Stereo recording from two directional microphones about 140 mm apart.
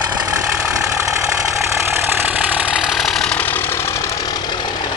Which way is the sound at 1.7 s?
15° right (ahead or behind).